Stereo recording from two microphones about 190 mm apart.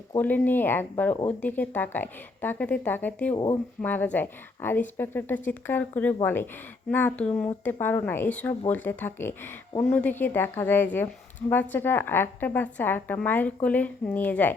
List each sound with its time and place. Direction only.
0.2 s a woman's voice: 10° left (ahead or behind)
3.3 s speech: 20° left (ahead or behind)
3.8 s a woman's voice: 10° left (ahead or behind)